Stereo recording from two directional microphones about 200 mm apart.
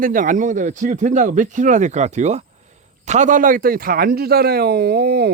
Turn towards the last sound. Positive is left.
turn(degrees=-50)  # may be behind; listen again after turning